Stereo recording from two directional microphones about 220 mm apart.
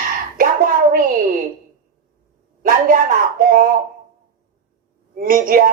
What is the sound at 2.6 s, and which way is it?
Speech, 40° right (ahead or behind).